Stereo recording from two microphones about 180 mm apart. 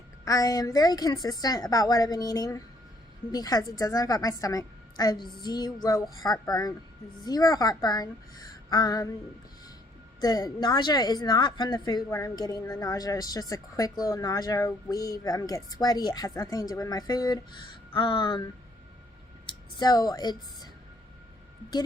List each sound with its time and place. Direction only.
0.3 s a woman's voice: 20° left (ahead or behind)
10.2 s a woman's voice: 20° left (ahead or behind)
19.7 s a woman's voice: 20° left (ahead or behind)